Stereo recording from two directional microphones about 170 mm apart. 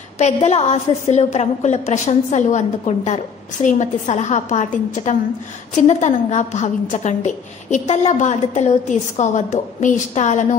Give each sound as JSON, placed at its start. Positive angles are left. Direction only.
{"t": 0.2, "sound": "a woman's voice", "side_deg": 40}